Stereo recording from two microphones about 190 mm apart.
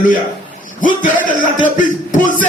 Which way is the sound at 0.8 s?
45° left (ahead or behind).